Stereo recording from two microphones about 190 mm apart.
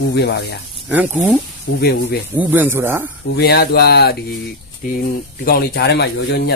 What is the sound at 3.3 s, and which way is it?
Speech, 55° left (ahead or behind).